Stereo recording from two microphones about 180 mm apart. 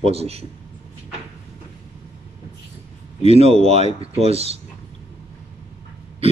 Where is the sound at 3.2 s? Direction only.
35° right (ahead or behind).